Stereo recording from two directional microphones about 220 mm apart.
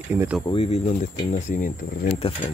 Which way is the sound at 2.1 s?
25° left (ahead or behind).